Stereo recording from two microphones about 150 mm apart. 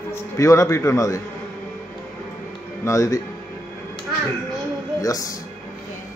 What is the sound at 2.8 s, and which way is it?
Speech, 20° left (ahead or behind).